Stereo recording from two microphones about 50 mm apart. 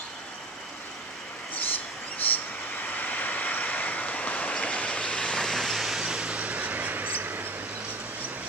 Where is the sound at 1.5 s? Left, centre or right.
Left; by 7.5 s right.